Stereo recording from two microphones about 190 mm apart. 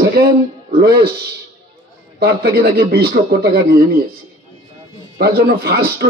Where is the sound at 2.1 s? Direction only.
55° right (ahead or behind).